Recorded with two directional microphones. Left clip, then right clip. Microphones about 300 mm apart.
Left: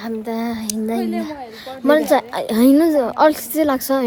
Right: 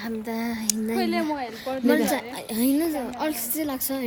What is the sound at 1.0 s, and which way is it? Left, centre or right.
Speech, right.